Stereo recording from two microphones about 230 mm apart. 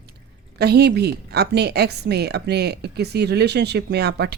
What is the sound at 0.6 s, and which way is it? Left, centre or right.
Speech, right.